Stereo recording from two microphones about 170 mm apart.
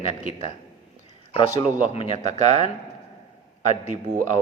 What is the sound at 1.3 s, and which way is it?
Speech, 30° left (ahead or behind).